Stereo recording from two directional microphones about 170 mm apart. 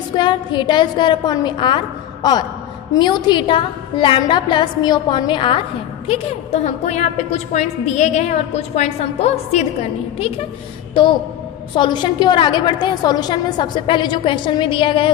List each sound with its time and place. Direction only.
0.2 s a woman's voice: 25° left (ahead or behind)
2.9 s a woman's voice: 25° left (ahead or behind)
6.1 s a woman's voice: 40° left (ahead or behind)